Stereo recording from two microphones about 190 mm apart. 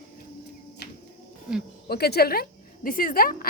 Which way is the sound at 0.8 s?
60° left (ahead or behind).